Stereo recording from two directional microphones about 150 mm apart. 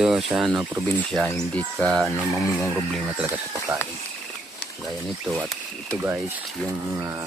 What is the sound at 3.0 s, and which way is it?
Speech, 15° right (ahead or behind).